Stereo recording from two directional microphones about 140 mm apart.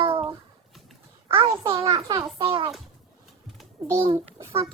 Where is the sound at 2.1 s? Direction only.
40° right (ahead or behind).